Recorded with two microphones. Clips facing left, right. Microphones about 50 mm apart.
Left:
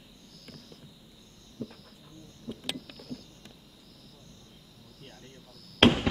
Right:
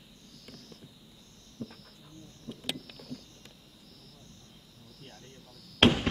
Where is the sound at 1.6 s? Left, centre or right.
Left.